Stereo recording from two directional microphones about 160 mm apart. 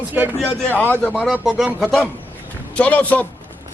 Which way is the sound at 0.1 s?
10° right (ahead or behind).